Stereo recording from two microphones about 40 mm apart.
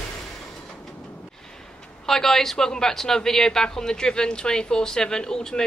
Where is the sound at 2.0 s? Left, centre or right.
Centre.